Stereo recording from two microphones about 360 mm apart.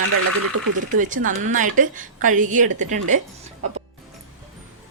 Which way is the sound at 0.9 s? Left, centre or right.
Right.